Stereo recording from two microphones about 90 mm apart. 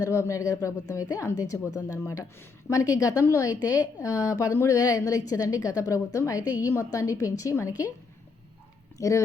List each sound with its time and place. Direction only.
0.0 s a woman's voice: 35° left (ahead or behind)
9.0 s speech: 35° left (ahead or behind)